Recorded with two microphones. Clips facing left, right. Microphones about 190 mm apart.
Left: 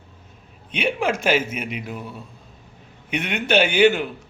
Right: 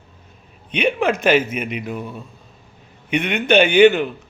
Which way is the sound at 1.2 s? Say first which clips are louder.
Right 4 dB; 60° right (ahead or behind).